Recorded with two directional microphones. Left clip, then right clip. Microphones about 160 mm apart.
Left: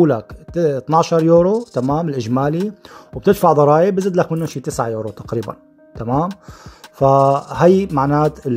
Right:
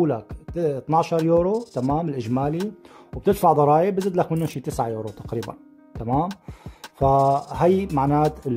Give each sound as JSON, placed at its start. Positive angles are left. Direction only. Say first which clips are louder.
{"t": 0.0, "sound": "speech", "louder": "left 8 dB", "side_deg": 20}
{"t": 5.5, "sound": "music", "louder": "left 7 dB", "side_deg": 15}
{"t": 7.0, "sound": "speech", "louder": "left 6 dB", "side_deg": 20}